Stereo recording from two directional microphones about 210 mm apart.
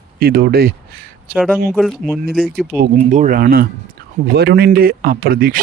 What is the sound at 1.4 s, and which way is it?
Speech, centre (ahead or behind).